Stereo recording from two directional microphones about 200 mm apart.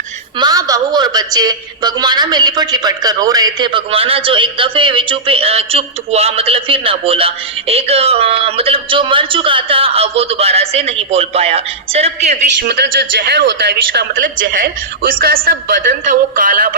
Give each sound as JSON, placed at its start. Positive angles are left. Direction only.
{"t": 0.3, "sound": "a woman's voice", "side_deg": -20}
{"t": 12.6, "sound": "speech", "side_deg": -55}